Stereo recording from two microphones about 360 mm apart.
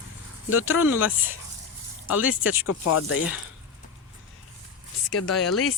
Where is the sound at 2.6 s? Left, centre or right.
Left.